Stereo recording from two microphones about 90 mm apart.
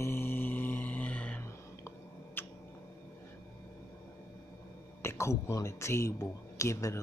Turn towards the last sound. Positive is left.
turn(degrees=30)  # may be behind; listen again after turning